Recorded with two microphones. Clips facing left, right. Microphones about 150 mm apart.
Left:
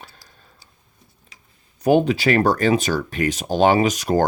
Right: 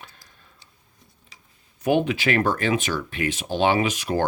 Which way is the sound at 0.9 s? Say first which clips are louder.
Left 1 dB; centre (ahead or behind).